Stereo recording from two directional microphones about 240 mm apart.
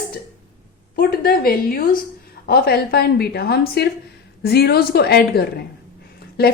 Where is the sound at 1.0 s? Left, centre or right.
Left.